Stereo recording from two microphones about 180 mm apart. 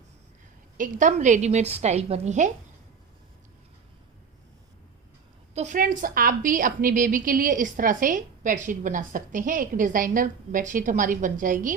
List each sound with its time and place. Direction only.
0.8 s a woman's voice: 45° right (ahead or behind)
5.5 s a woman's voice: 45° right (ahead or behind)